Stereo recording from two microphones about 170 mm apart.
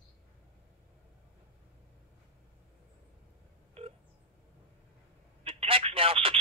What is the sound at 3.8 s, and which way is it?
Telephone dialing, 35° right (ahead or behind).